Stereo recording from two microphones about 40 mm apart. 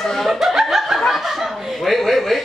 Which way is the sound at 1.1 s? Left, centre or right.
Centre.